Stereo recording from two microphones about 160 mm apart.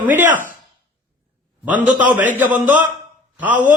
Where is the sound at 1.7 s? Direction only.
10° right (ahead or behind).